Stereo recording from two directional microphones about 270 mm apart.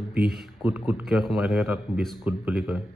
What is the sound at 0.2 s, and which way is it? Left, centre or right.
Speech, right.